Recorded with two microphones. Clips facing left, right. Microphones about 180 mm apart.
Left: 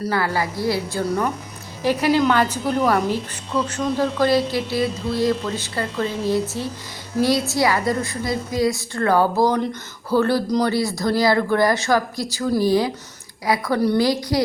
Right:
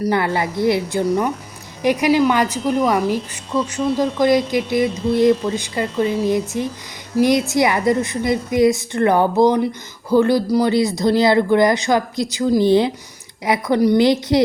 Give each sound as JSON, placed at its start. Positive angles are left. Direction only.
{"t": 0.0, "sound": "a woman's voice", "side_deg": -20}